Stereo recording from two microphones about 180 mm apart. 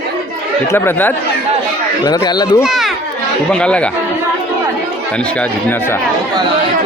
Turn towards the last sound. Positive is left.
turn(degrees=10)  # may be behind; listen again after turning